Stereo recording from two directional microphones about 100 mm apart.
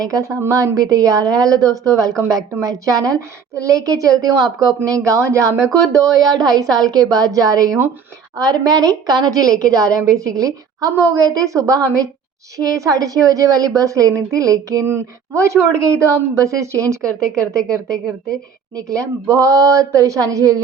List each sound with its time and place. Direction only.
0.0 s a woman's voice: 35° right (ahead or behind)